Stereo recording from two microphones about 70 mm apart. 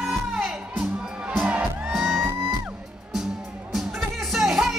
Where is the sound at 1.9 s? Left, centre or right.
Centre.